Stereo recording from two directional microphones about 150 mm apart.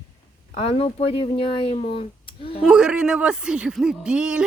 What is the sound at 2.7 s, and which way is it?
Speech, 5° right (ahead or behind).